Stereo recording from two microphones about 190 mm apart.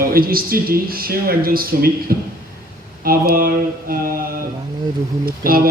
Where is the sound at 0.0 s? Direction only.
50° right (ahead or behind).